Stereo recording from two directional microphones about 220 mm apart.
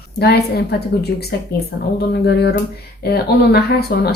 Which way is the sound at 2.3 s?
50° left (ahead or behind).